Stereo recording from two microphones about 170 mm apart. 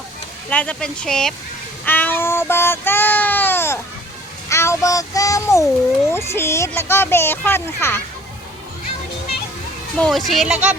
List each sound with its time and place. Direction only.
0.5 s speech: 5° left (ahead or behind)
1.8 s child singing: 10° left (ahead or behind)
4.4 s a child's voice: 15° left (ahead or behind)
10.0 s speech: centre (ahead or behind)